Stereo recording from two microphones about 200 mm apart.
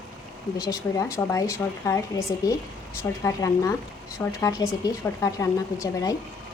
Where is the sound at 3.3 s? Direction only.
15° left (ahead or behind).